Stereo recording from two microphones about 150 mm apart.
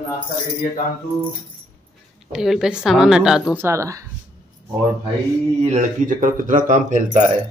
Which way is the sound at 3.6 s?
20° right (ahead or behind).